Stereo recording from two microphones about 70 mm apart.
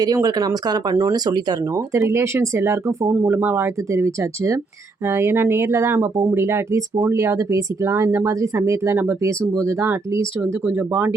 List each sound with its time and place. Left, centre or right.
0.0 s speech: right
0.9 s speech: right
1.7 s speech: right
5.5 s speech: right
5.9 s speech: right
10.7 s speech: right